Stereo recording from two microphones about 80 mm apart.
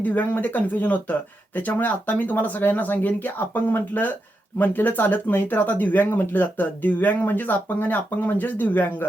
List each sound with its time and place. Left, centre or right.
0.0 s speech: left